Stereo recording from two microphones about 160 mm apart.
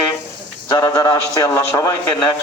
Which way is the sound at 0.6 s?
25° left (ahead or behind).